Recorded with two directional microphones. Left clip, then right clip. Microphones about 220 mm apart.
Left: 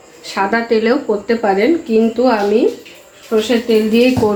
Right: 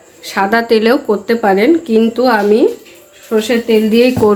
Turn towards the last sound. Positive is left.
turn(degrees=-40)  # may be behind; listen again after turning